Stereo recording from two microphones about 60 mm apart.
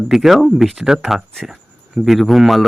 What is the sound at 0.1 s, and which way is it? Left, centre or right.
A man's voice, centre.